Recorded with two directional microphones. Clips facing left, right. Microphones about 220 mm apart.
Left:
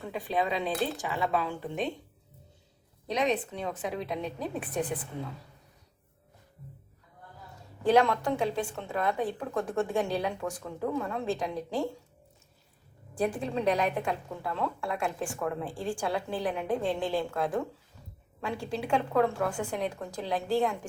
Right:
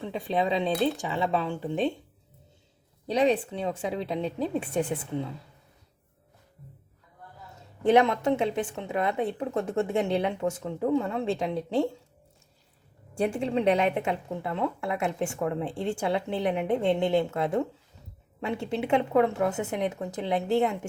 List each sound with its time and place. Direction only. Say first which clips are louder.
0.9 s speech: right 6 dB; centre (ahead or behind)
1.4 s a woman's voice: right 4 dB; 30° right (ahead or behind)
3.1 s a woman's voice: right 5 dB; 30° right (ahead or behind)
7.9 s a woman's voice: right 3 dB; 20° right (ahead or behind)
13.1 s a woman's voice: right 4 dB; 25° right (ahead or behind)